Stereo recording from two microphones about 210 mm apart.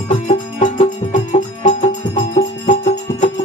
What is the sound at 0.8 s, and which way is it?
Music, 35° left (ahead or behind).